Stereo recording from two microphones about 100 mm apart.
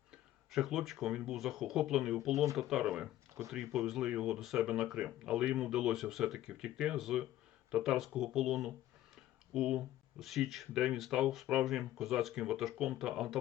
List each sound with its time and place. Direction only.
0.5 s speech: centre (ahead or behind)